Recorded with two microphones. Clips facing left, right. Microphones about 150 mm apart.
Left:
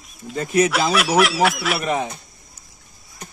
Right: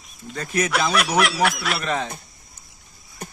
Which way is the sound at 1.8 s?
15° left (ahead or behind).